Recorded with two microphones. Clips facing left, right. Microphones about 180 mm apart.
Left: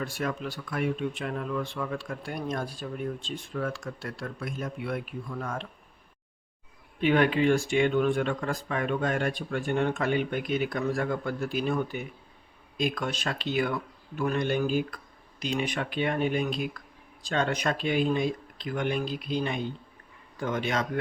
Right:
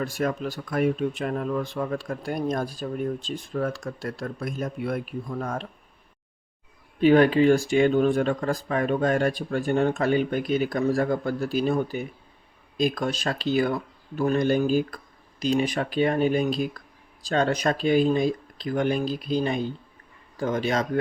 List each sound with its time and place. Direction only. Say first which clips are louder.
0.0 s speech: right 5 dB; 40° right (ahead or behind)
7.0 s speech: right 6 dB; 35° right (ahead or behind)